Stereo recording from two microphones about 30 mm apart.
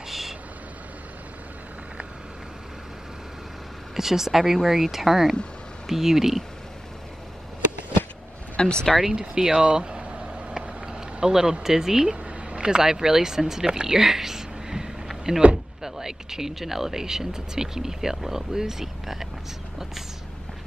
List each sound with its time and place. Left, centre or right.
3.9 s speech: centre
8.6 s speech: left
8.9 s speech: centre
9.8 s vehicle: right
10.5 s a sound: right
11.6 s speech: centre
12.1 s speech: right
14.0 s a sound: centre
15.3 s speech: centre